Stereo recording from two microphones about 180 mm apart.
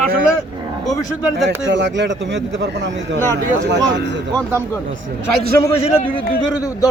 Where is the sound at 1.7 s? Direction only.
80° right.